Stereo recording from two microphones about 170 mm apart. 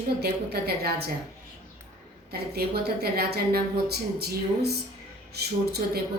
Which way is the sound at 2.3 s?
70° right (ahead or behind).